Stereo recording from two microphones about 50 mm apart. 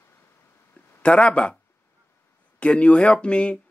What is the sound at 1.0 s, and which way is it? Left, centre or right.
Speech, left.